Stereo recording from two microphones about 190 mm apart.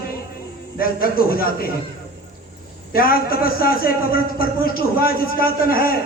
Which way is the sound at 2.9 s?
50° left (ahead or behind).